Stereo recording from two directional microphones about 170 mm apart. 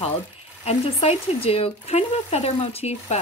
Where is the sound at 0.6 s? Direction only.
35° left (ahead or behind).